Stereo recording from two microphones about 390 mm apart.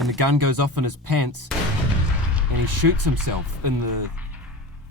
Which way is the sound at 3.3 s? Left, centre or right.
Right.